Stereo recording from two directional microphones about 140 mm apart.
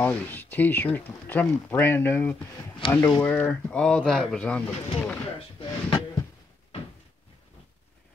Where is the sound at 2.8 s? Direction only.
35° left (ahead or behind).